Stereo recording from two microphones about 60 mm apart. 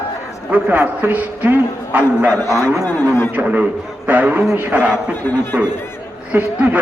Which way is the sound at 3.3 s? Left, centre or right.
Right.